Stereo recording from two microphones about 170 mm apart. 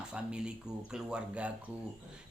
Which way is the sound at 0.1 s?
5° right (ahead or behind).